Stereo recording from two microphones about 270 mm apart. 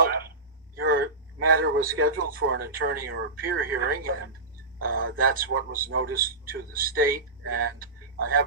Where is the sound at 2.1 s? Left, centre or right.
Right.